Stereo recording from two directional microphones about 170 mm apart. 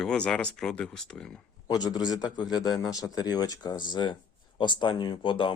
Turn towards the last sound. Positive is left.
turn(degrees=30)  # may be behind; listen again after turning